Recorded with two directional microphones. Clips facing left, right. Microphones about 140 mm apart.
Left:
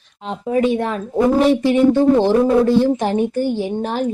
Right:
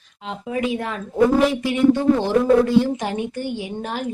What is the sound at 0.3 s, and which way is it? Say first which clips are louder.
A woman's voice: left 6 dB; 35° left (ahead or behind).